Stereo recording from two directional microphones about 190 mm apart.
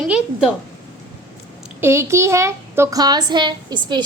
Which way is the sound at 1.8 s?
15° right (ahead or behind).